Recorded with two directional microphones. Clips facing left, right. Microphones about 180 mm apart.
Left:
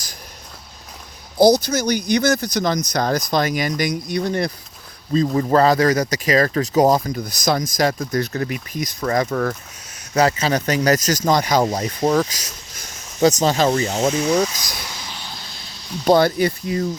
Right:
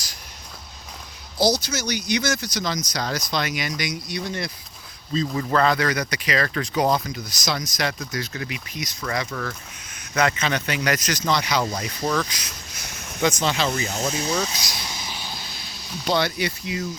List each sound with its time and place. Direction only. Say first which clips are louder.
1.6 s speech: left 7 dB; 50° left (ahead or behind)
5.1 s speech: left 6 dB; 40° left (ahead or behind)
14.8 s a sound: even; 15° right (ahead or behind)
16.0 s speech: left 8 dB; 45° left (ahead or behind)